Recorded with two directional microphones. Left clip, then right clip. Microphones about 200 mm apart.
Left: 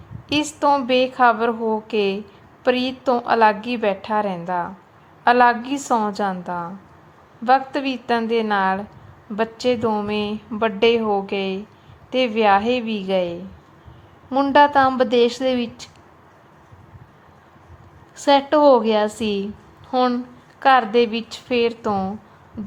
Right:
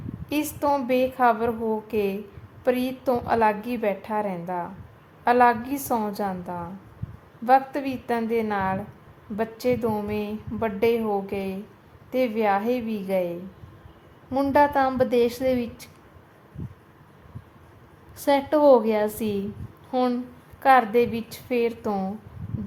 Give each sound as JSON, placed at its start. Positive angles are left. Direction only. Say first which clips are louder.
{"t": 0.3, "sound": "a woman's voice", "louder": "left 6 dB", "side_deg": 15}
{"t": 18.3, "sound": "a woman's voice", "louder": "left 4 dB", "side_deg": 15}